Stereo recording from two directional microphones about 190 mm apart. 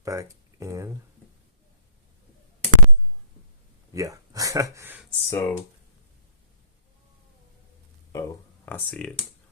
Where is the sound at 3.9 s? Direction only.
15° right (ahead or behind).